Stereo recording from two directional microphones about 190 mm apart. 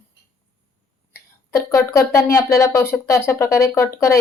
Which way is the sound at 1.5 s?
15° left (ahead or behind).